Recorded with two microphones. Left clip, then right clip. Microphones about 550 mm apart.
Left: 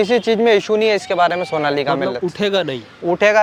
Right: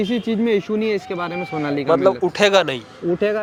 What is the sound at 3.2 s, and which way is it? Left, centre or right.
Speech, left.